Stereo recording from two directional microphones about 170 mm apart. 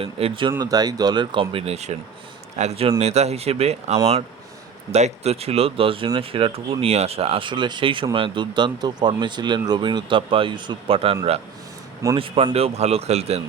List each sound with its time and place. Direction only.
0.0 s a man's voice: 35° right (ahead or behind)